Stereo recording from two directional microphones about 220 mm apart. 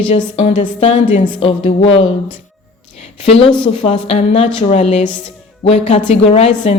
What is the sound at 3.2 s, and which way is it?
A woman's voice, 25° left (ahead or behind).